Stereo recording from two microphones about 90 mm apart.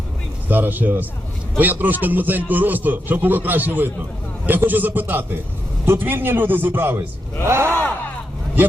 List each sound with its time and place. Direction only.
0.4 s a man's voice: 20° right (ahead or behind)